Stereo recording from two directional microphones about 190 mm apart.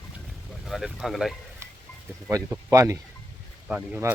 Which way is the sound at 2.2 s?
15° right (ahead or behind).